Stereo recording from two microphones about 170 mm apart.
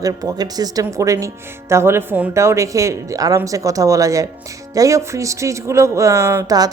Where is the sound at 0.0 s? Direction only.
20° right (ahead or behind).